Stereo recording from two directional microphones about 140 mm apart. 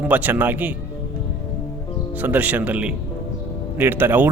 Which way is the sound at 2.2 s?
10° right (ahead or behind).